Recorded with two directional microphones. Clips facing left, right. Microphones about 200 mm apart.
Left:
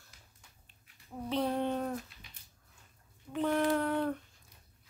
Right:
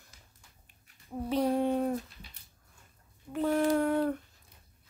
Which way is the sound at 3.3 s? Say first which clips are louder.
Right 3 dB; 10° right (ahead or behind).